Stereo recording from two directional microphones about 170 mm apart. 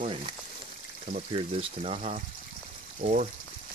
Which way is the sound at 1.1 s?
35° right (ahead or behind).